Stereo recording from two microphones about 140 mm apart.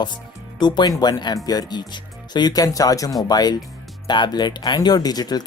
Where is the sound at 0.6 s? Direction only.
30° left (ahead or behind).